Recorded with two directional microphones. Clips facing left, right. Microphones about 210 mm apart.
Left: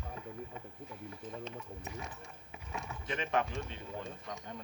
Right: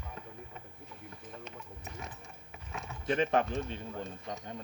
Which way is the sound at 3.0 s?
35° right (ahead or behind).